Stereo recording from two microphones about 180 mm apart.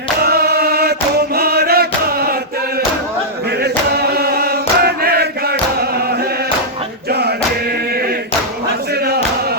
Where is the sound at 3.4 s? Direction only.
60° right (ahead or behind).